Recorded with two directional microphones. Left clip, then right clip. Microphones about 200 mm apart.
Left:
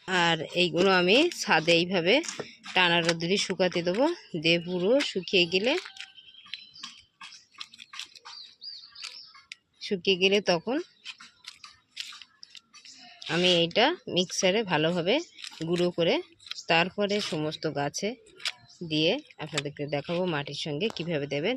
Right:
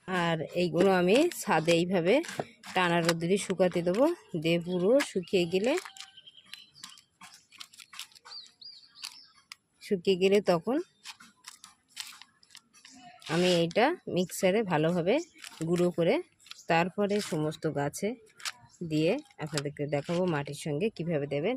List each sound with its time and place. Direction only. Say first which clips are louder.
0.0 s speech: left 5 dB; 5° left (ahead or behind)
9.8 s speech: left 2 dB; 15° right (ahead or behind)
13.2 s speech: left 3 dB; 15° right (ahead or behind)